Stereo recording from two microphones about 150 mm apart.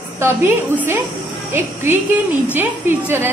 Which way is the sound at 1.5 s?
15° right (ahead or behind).